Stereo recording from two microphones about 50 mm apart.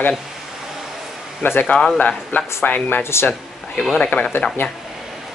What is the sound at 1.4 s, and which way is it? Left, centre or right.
Speech, left.